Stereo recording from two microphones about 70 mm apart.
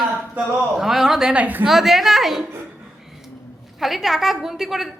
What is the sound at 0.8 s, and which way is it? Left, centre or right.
Speech, centre.